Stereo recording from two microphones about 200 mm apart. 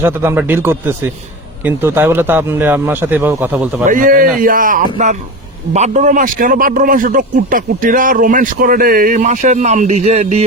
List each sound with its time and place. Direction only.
0.0 s speech: 10° right (ahead or behind)
3.8 s a man's voice: 40° right (ahead or behind)